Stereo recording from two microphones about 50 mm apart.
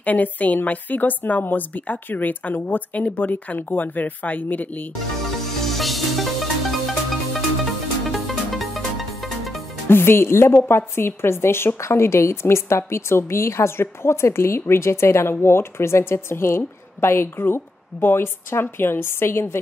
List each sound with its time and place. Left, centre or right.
0.0 s speech: left
5.7 s music: centre
9.8 s a woman's voice: left